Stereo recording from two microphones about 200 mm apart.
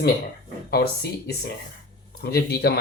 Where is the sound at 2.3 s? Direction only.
50° left (ahead or behind).